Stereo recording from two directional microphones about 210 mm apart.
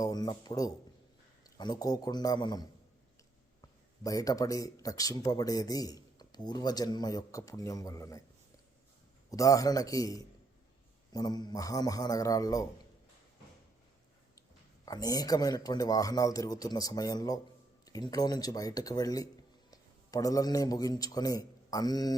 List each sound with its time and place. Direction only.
0.0 s a man's voice: 20° left (ahead or behind)
9.3 s speech: 15° left (ahead or behind)
14.8 s a man's voice: 20° left (ahead or behind)